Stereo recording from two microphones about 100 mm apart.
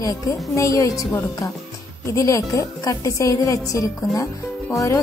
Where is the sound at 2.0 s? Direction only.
30° left (ahead or behind).